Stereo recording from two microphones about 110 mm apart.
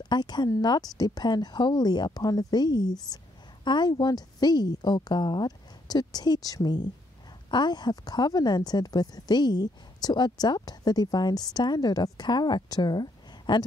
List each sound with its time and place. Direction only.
0.0 s a woman's voice: 40° left (ahead or behind)